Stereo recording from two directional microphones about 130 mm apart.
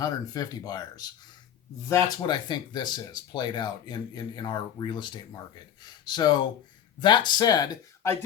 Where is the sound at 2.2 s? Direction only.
35° left (ahead or behind).